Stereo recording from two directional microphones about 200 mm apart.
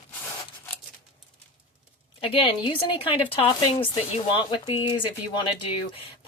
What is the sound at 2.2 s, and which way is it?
Speech, 30° left (ahead or behind).